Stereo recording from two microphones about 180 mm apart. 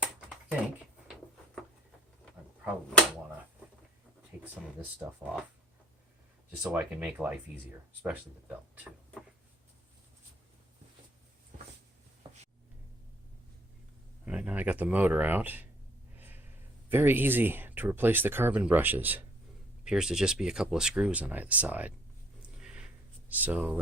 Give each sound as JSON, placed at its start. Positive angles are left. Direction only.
{"t": 0.0, "sound": "typing", "side_deg": -5}
{"t": 4.3, "sound": "a sound", "side_deg": -10}
{"t": 4.8, "sound": "speech", "side_deg": -5}
{"t": 6.6, "sound": "speech", "side_deg": -5}
{"t": 12.2, "sound": "a sound", "side_deg": -30}
{"t": 14.3, "sound": "speech", "side_deg": -5}
{"t": 16.1, "sound": "snort", "side_deg": -10}
{"t": 16.9, "sound": "speech", "side_deg": -10}
{"t": 22.4, "sound": "a sound", "side_deg": -5}
{"t": 23.3, "sound": "speech", "side_deg": -10}